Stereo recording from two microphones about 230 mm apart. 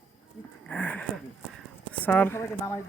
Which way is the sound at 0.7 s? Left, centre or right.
Centre.